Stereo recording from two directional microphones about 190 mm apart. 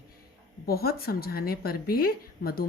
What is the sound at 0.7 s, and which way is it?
Speech, 55° left (ahead or behind).